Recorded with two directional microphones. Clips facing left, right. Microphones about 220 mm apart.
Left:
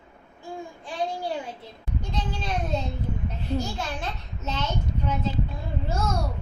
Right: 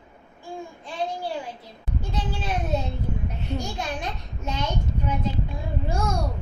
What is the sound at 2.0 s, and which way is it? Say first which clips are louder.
A child's voice: right 1 dB; 10° right (ahead or behind).